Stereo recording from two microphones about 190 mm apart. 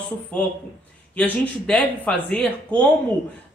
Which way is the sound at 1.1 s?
5° left (ahead or behind).